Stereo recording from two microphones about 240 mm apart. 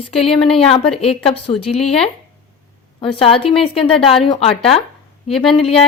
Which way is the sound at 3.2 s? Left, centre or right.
Left.